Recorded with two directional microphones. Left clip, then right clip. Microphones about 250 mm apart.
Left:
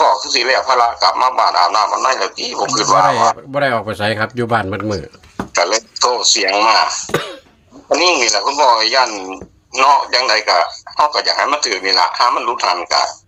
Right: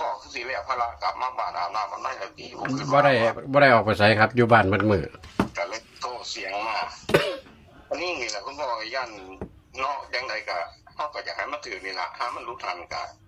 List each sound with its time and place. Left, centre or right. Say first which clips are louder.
0.0 s speech: left 18 dB; left
3.5 s speech: left 1 dB; centre
5.5 s speech: left 16 dB; left
7.1 s cough: left 2 dB; left
7.9 s speech: left 16 dB; left